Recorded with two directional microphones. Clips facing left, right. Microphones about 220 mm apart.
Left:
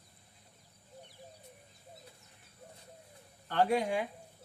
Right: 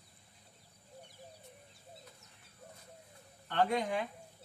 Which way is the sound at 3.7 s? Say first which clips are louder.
Left 3 dB; 10° left (ahead or behind).